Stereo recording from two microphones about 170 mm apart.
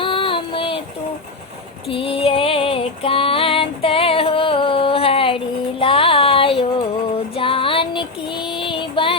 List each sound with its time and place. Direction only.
0.0 s child singing: 30° left (ahead or behind)
1.9 s female singing: 35° left (ahead or behind)
5.8 s a sound: 30° left (ahead or behind)
7.3 s child singing: 30° left (ahead or behind)